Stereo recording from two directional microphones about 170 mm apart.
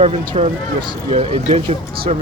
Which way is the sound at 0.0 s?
35° right (ahead or behind).